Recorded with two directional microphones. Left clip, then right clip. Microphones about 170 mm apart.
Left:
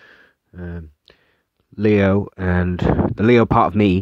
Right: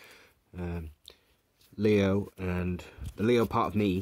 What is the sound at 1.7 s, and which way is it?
Speech, 40° left (ahead or behind).